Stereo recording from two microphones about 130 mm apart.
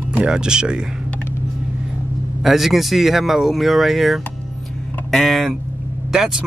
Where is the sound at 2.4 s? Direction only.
Centre (ahead or behind).